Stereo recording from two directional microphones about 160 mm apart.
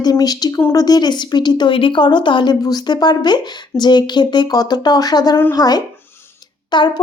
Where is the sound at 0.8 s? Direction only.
25° left (ahead or behind).